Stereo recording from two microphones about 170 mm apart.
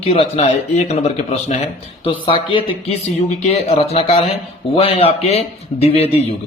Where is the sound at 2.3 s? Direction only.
30° left (ahead or behind).